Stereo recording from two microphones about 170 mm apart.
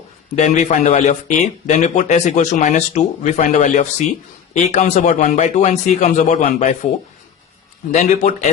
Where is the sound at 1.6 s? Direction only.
45° left (ahead or behind).